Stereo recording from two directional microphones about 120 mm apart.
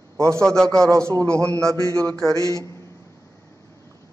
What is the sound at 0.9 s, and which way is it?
A man's voice, 25° right (ahead or behind).